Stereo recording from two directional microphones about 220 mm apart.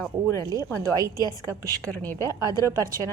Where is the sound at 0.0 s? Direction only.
15° left (ahead or behind).